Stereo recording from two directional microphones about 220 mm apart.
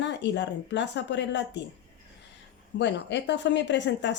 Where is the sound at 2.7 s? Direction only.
55° left (ahead or behind).